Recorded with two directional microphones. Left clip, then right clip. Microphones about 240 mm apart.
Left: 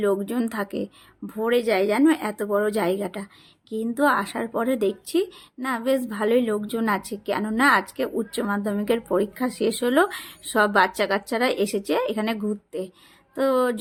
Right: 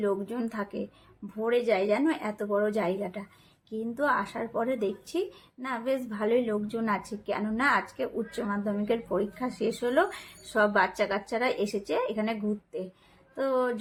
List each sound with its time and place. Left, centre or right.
0.0 s a woman's voice: left